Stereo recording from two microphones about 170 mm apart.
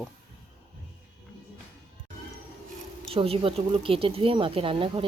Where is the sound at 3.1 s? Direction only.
35° right (ahead or behind).